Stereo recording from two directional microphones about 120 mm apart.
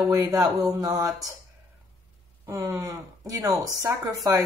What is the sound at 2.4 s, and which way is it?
Speech, 25° right (ahead or behind).